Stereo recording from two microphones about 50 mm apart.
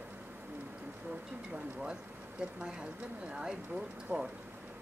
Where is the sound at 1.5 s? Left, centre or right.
Right.